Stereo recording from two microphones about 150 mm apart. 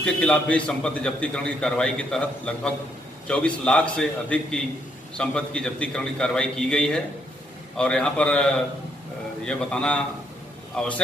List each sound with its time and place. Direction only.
0.0 s a man's voice: 5° left (ahead or behind)